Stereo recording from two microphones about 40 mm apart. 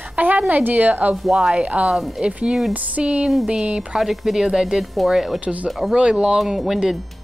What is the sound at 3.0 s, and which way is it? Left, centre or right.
Speech, right.